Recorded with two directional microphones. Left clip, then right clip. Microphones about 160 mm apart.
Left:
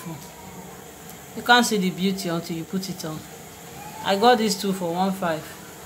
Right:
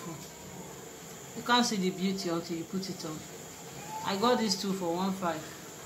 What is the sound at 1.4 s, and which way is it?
Speech, 40° left (ahead or behind).